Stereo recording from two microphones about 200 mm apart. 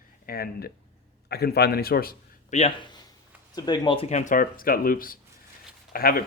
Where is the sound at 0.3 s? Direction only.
50° left (ahead or behind).